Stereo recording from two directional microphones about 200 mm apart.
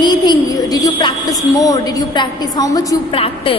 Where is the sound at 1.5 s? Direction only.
15° left (ahead or behind).